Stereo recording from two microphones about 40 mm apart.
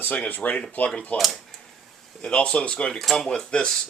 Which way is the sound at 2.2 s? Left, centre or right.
Left.